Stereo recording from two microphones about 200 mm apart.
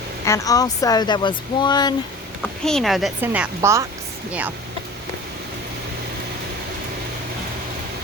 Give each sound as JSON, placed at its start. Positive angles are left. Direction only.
{"t": 0.3, "sound": "speech", "side_deg": 15}
{"t": 2.6, "sound": "a woman's voice", "side_deg": 0}